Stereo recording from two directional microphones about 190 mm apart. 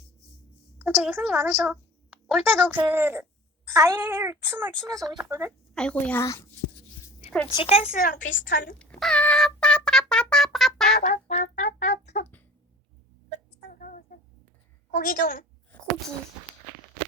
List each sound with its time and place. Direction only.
0.8 s a child's voice: 10° right (ahead or behind)
2.7 s a child's voice: 10° right (ahead or behind)
5.7 s a woman's voice: 5° left (ahead or behind)
7.5 s speech: 30° left (ahead or behind)
8.3 s a woman's voice: 70° left (ahead or behind)
8.8 s music: 5° left (ahead or behind)
11.0 s brass instrument: 35° left (ahead or behind)
13.7 s a sound: 45° left (ahead or behind)
14.9 s a woman's voice: 45° left (ahead or behind)